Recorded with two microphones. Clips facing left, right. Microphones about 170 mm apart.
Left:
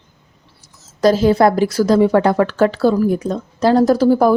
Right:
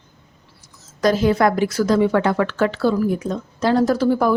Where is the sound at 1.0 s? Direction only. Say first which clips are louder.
Left 4 dB; 30° left (ahead or behind).